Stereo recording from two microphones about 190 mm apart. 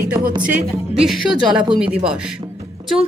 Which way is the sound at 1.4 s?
5° right (ahead or behind).